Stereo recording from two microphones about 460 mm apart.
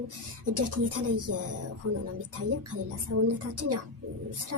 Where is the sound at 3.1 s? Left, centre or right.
Right.